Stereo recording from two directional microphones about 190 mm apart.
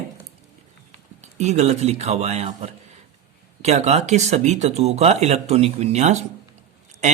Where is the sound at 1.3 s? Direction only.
35° right (ahead or behind).